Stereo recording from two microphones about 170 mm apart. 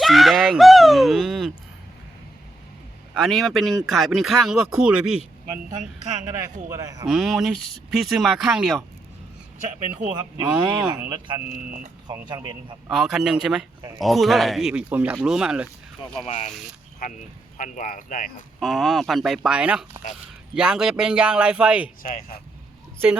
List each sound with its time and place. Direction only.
0.0 s speech: centre (ahead or behind)
3.2 s speech: centre (ahead or behind)
6.4 s speech: 20° right (ahead or behind)
7.1 s speech: centre (ahead or behind)
10.2 s speech: 25° right (ahead or behind)
12.9 s speech: 5° right (ahead or behind)
16.2 s speech: 40° left (ahead or behind)
17.6 s speech: 50° left (ahead or behind)
18.6 s speech: centre (ahead or behind)
22.0 s speech: 60° left (ahead or behind)